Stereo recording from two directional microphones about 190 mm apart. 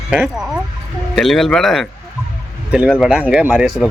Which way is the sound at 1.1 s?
Centre (ahead or behind).